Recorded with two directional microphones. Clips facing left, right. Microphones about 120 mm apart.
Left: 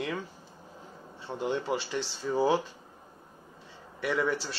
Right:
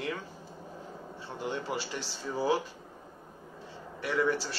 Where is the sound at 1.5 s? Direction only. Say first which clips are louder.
Left 5 dB; 20° left (ahead or behind).